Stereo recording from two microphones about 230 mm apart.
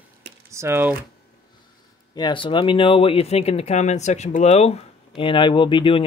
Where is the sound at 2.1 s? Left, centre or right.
Centre.